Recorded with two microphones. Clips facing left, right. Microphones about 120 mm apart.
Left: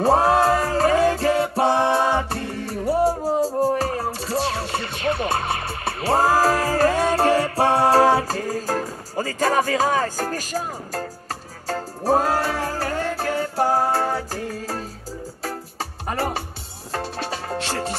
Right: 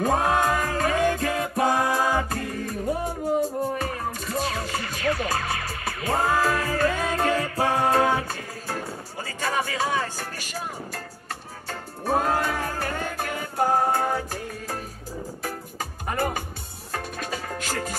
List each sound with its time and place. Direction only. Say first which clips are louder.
0.0 s music: left 5 dB; 35° left (ahead or behind)